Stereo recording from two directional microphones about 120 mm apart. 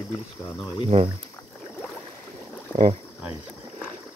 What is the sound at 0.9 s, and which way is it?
Speech, 50° right (ahead or behind).